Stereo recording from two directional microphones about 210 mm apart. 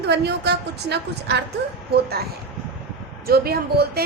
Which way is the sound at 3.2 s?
45° right (ahead or behind).